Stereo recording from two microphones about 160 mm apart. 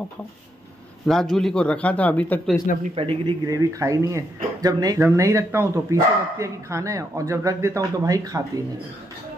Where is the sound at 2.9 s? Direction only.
35° right (ahead or behind).